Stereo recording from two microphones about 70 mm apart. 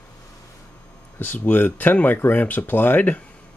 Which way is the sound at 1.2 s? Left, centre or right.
Left.